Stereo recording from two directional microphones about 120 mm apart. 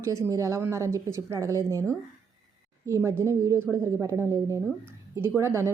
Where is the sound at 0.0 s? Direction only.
25° right (ahead or behind).